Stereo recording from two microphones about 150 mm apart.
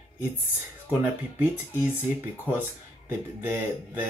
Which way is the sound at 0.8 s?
10° right (ahead or behind).